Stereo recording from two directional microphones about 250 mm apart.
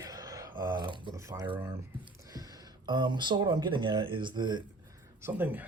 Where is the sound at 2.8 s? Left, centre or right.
Centre.